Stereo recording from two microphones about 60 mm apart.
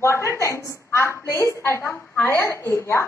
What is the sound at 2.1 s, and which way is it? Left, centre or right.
Speech, left.